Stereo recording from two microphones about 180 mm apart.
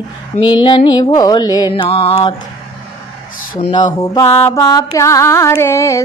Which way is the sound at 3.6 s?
30° left (ahead or behind).